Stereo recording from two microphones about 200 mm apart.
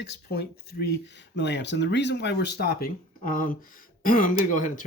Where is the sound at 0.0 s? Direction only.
55° left (ahead or behind).